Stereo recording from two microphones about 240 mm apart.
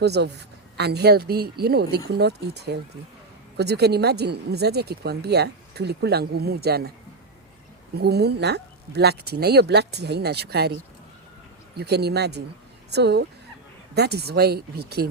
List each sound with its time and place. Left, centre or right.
0.0 s speech: right
7.9 s speech: right
11.8 s speech: right